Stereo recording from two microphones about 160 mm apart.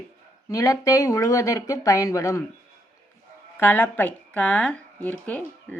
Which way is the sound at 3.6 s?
10° left (ahead or behind).